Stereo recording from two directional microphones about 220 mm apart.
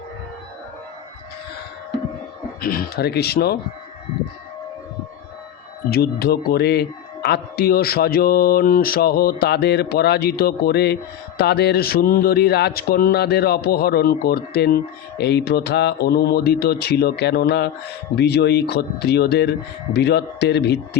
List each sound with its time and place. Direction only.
2.6 s a man's voice: 40° left (ahead or behind)
5.9 s a man's voice: 45° left (ahead or behind)